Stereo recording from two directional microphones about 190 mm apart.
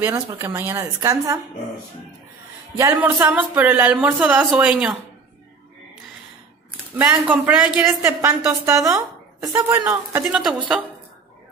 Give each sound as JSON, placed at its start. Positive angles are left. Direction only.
{"t": 0.0, "sound": "a woman's voice", "side_deg": -15}
{"t": 2.8, "sound": "a woman's voice", "side_deg": -15}
{"t": 7.0, "sound": "a woman's voice", "side_deg": -10}